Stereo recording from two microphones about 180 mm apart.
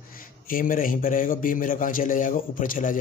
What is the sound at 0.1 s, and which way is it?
Speech, 50° left (ahead or behind).